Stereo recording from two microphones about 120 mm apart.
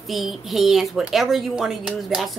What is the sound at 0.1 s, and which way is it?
A woman's voice, centre (ahead or behind).